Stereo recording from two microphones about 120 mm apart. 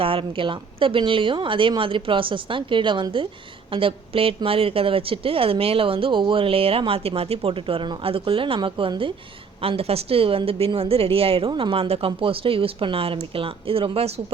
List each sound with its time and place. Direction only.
0.0 s a woman's voice: 50° right (ahead or behind)